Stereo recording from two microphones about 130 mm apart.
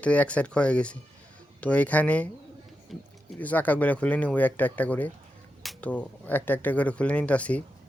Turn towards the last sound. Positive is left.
turn(degrees=10)  # may be behind; listen again after turning